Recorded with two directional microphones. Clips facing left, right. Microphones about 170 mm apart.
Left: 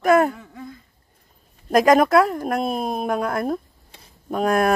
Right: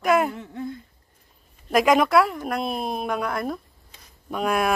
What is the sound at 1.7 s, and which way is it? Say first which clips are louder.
A woman's voice: left 3 dB; 40° left (ahead or behind).